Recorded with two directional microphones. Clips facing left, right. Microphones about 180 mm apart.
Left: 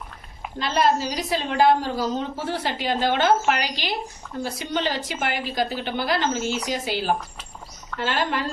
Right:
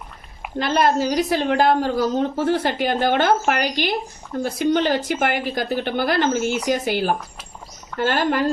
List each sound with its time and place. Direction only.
0.6 s a woman's voice: 55° right (ahead or behind)